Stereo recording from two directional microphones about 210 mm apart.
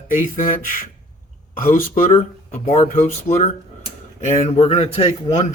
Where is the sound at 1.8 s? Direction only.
35° left (ahead or behind).